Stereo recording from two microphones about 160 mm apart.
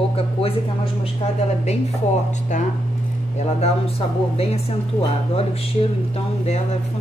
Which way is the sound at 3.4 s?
40° left (ahead or behind).